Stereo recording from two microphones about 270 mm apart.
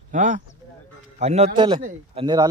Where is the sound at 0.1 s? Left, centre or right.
Right.